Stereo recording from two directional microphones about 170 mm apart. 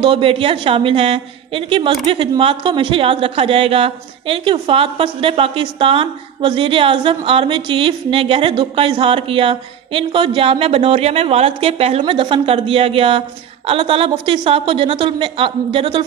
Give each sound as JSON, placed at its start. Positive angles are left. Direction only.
{"t": 0.0, "sound": "a woman's voice", "side_deg": -30}